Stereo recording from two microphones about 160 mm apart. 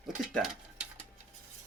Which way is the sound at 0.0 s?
5° right (ahead or behind).